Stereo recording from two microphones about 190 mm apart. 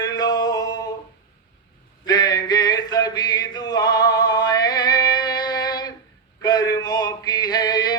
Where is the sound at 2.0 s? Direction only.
20° left (ahead or behind).